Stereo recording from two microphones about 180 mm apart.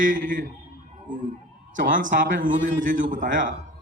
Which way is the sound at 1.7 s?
45° right (ahead or behind).